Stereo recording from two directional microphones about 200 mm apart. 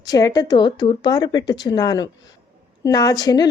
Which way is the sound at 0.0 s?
20° left (ahead or behind).